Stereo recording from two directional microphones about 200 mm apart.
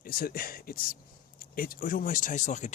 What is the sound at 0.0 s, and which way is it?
Speech, 45° left (ahead or behind).